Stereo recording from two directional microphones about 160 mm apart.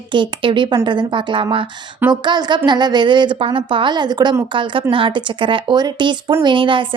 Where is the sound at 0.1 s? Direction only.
30° right (ahead or behind).